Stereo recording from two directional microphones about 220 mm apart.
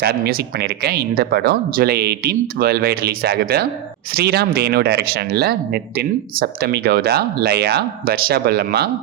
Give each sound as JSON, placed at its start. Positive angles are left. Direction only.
{"t": 0.0, "sound": "speech", "side_deg": -45}